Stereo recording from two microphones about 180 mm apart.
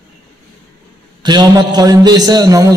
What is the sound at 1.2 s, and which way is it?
A man's voice, 25° right (ahead or behind).